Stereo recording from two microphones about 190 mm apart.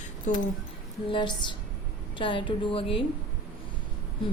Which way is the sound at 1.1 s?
25° left (ahead or behind).